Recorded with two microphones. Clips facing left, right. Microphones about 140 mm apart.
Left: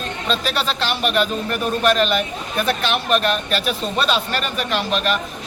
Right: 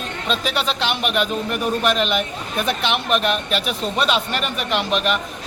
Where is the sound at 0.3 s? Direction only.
15° right (ahead or behind).